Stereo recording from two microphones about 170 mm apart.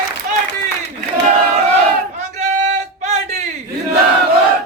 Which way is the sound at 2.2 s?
45° right (ahead or behind).